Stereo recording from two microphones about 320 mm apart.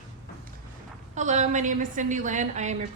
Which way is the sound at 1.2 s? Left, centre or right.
Right.